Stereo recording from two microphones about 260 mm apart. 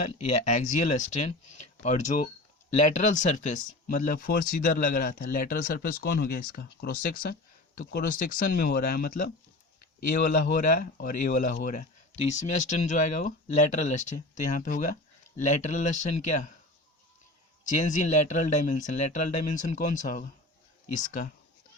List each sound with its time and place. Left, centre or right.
0.2 s speech: left
10.1 s speech: left
17.6 s speech: left